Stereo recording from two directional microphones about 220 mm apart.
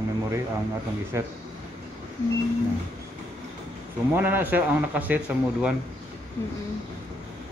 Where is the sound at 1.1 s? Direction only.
10° right (ahead or behind).